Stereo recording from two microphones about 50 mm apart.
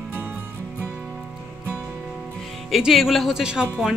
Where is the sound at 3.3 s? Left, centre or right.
Centre.